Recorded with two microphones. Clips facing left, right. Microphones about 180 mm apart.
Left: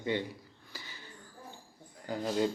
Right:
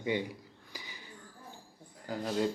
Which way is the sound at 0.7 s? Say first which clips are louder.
Right 1 dB; 15° right (ahead or behind).